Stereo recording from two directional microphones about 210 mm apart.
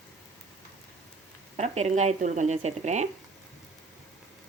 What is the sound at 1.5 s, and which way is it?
Speech, 30° right (ahead or behind).